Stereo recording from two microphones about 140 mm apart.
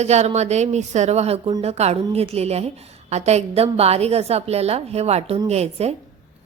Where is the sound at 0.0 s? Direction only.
50° right (ahead or behind).